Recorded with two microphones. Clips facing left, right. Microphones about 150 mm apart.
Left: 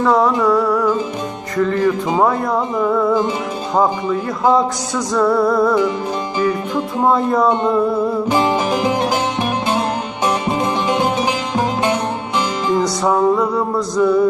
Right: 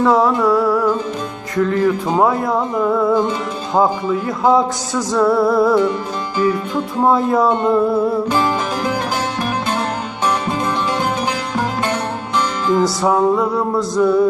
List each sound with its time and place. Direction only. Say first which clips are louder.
0.0 s music: even; centre (ahead or behind)
7.0 s music: right 1 dB; 5° right (ahead or behind)
8.7 s music: left 3 dB; 20° left (ahead or behind)
12.7 s music: right 1 dB; centre (ahead or behind)